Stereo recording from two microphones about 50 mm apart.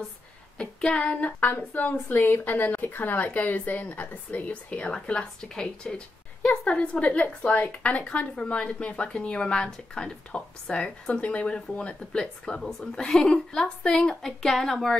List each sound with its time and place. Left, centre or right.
0.6 s a woman's voice: left
6.4 s a woman's voice: left
11.1 s a woman's voice: left; by 15.0 s centre